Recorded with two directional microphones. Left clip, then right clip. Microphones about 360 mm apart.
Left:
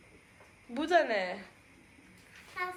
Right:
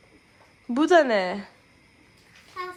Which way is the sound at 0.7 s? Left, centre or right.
Right.